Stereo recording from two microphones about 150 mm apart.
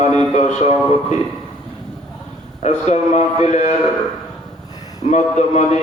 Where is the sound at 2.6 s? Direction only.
50° left (ahead or behind).